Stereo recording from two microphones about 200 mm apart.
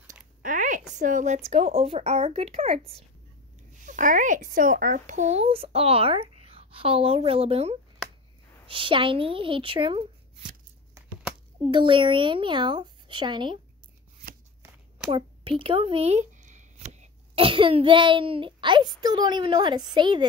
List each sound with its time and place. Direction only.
0.4 s a sound: 40° right (ahead or behind)
0.9 s speech: 40° right (ahead or behind)
11.7 s speech: 25° right (ahead or behind)
15.0 s speech: 25° right (ahead or behind)